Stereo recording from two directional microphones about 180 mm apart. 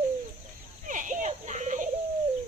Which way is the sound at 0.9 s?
45° right (ahead or behind).